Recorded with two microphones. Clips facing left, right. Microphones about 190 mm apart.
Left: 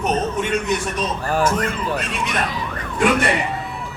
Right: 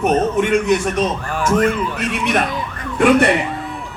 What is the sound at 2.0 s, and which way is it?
Speech, 60° right (ahead or behind).